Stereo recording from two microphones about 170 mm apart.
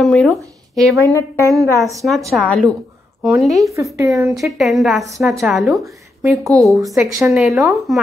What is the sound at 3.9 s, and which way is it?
Speech, 20° right (ahead or behind).